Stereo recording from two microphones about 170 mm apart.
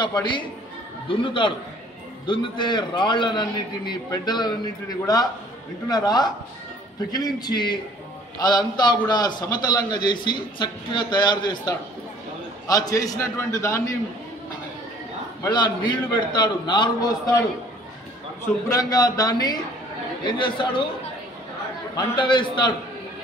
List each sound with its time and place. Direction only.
0.0 s a man's voice: 25° left (ahead or behind)
15.5 s a man's voice: 25° left (ahead or behind)
18.7 s a man's voice: 20° left (ahead or behind)
21.9 s a man's voice: 25° left (ahead or behind)